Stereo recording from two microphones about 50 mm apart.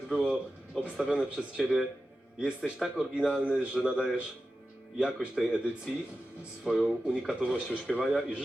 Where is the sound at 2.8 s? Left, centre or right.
Centre.